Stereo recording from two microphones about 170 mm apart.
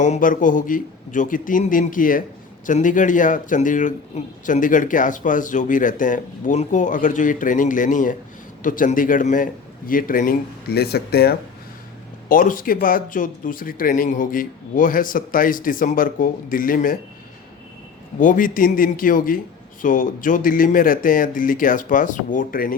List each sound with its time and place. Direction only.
0.0 s speech: 50° left (ahead or behind); by 11.3 s 70° left (ahead or behind)
12.3 s speech: 55° left (ahead or behind)
18.2 s speech: 50° left (ahead or behind)